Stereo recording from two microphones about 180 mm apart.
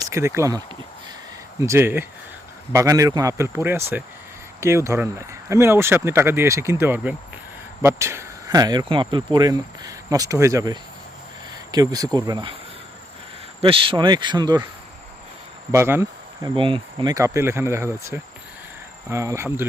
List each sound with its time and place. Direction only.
0.0 s speech: 15° right (ahead or behind)
1.6 s speech: 15° right (ahead or behind)
13.6 s speech: 30° right (ahead or behind)
15.7 s speech: 15° right (ahead or behind)
16.6 s speech: 30° right (ahead or behind)